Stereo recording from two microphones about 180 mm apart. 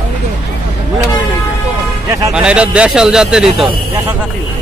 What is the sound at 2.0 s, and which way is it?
Speech, 20° right (ahead or behind).